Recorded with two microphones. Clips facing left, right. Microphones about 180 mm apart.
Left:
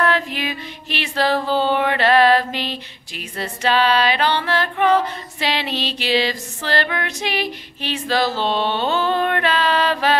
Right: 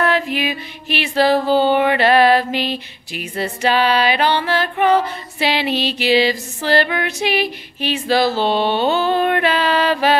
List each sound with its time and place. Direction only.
0.0 s music: 10° right (ahead or behind)